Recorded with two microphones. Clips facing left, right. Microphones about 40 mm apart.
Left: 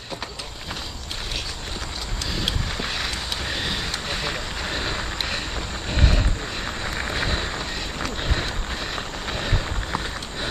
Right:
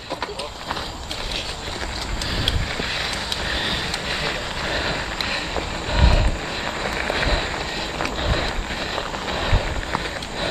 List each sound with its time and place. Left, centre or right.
2.4 s vehicle: centre
8.0 s a sound: centre
8.9 s vehicle: centre